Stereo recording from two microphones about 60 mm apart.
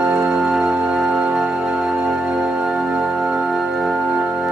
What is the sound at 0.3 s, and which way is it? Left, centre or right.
Music, centre.